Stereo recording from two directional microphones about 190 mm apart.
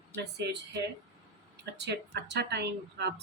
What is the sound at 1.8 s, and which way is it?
Speech, 60° right (ahead or behind).